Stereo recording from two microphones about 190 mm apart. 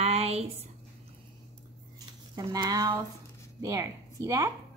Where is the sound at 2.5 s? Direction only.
20° right (ahead or behind).